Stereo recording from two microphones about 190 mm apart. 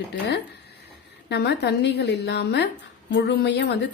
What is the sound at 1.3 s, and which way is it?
A woman's voice, 60° left (ahead or behind).